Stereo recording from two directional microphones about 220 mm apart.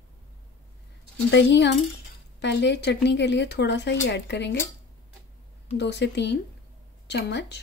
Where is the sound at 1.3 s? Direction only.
50° left (ahead or behind).